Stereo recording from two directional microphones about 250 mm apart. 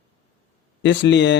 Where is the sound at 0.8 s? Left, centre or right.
Left.